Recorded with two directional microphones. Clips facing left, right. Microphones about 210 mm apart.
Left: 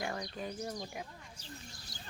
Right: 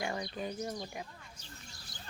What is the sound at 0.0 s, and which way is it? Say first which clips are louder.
Speech: right 2 dB; 5° right (ahead or behind).